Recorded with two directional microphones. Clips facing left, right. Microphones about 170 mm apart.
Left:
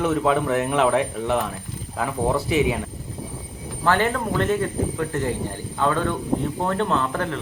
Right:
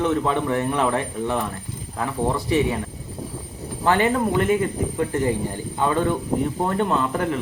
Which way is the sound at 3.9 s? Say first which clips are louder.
Right 2 dB; 15° right (ahead or behind).